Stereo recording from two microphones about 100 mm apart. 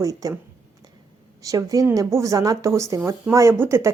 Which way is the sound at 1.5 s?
35° right (ahead or behind).